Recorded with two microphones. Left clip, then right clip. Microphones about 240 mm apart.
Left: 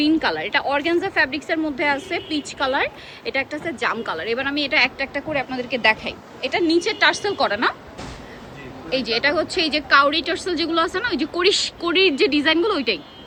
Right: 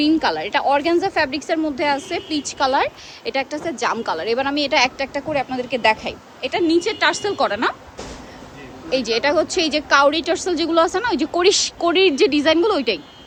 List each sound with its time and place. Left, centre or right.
0.0 s a woman's voice: centre
8.9 s a woman's voice: centre